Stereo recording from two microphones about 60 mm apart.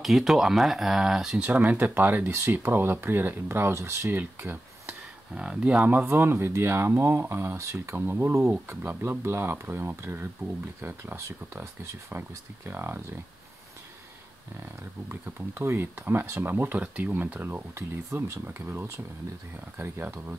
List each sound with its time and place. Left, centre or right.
0.0 s speech: centre
1.4 s speech: right
4.2 s speech: right
5.3 s speech: centre
5.9 s speech: right
8.0 s speech: right
11.1 s speech: right
12.2 s speech: right
15.0 s speech: right
17.7 s speech: right
18.4 s speech: right